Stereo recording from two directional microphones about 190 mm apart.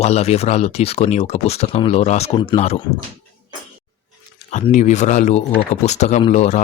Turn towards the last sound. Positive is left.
turn(degrees=40)  # may be behind; listen again after turning